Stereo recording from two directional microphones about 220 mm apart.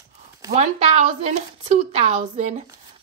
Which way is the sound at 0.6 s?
30° right (ahead or behind).